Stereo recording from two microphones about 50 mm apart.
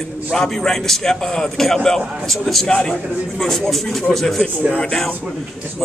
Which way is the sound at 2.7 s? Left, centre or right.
Centre.